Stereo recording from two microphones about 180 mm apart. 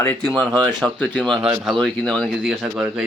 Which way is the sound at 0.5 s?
25° right (ahead or behind).